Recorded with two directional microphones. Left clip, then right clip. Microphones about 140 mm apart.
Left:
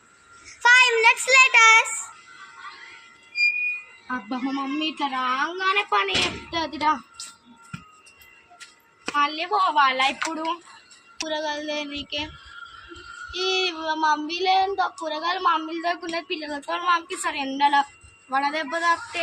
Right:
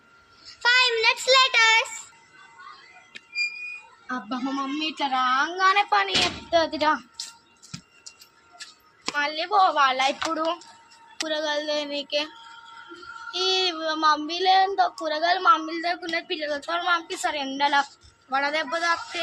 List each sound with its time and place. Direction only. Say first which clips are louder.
0.6 s child singing: left 4 dB; 20° right (ahead or behind)
4.3 s a woman's voice: even; 20° right (ahead or behind)
9.1 s a woman's voice: even; 20° right (ahead or behind)
11.2 s a woman's voice: right 1 dB; 20° right (ahead or behind)
13.3 s a woman's voice: right 1 dB; 20° right (ahead or behind)